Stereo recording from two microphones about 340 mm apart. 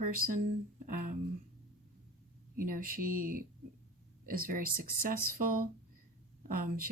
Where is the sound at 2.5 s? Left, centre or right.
Right.